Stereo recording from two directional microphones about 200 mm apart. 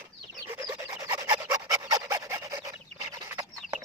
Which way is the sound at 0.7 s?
20° right (ahead or behind).